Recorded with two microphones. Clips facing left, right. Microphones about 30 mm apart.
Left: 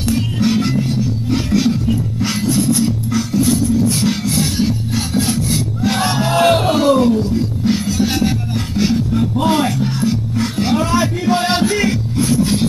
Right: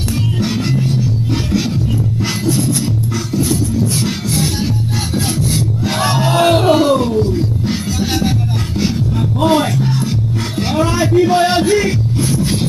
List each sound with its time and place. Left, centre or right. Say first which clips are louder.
6.0 s music: right 2 dB; centre
6.3 s music: right 2 dB; centre
9.5 s music: right 2 dB; centre